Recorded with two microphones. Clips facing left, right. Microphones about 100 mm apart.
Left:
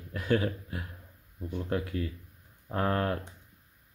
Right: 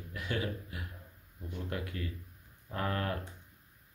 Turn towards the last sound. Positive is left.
turn(degrees=35)  # may be behind; listen again after turning